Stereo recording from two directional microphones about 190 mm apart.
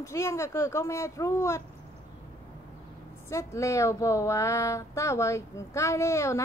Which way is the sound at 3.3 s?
15° left (ahead or behind).